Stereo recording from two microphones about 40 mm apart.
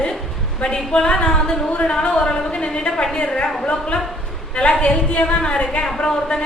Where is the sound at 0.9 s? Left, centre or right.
Left.